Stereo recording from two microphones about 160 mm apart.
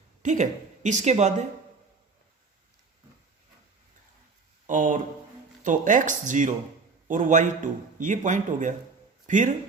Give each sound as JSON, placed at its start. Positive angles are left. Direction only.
{"t": 0.2, "sound": "a woman's voice", "side_deg": -50}
{"t": 4.6, "sound": "a man's voice", "side_deg": -55}